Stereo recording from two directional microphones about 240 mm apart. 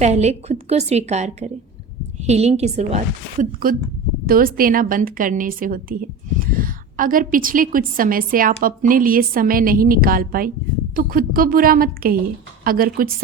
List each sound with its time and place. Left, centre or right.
0.0 s a woman's voice: right